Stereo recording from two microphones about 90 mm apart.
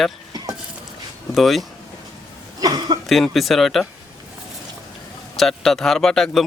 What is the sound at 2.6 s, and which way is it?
Cough, 50° right (ahead or behind).